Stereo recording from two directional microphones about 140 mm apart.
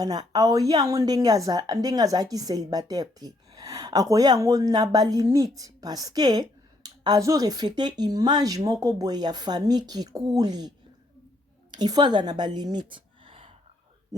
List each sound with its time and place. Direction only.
0.0 s a woman's voice: 30° right (ahead or behind)
11.7 s a woman's voice: 30° right (ahead or behind)
14.1 s a woman's voice: 25° right (ahead or behind)